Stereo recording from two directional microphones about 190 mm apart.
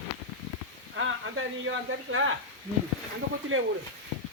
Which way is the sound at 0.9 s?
85° right.